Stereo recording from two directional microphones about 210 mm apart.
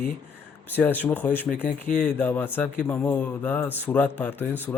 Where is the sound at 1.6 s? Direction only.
40° left (ahead or behind).